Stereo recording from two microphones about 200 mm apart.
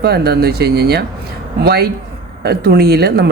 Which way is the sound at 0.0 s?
50° right (ahead or behind).